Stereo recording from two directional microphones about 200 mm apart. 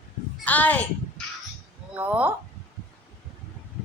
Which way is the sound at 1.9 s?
10° right (ahead or behind).